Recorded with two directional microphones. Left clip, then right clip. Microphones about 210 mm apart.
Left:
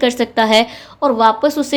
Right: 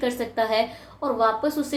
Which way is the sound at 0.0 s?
40° left (ahead or behind).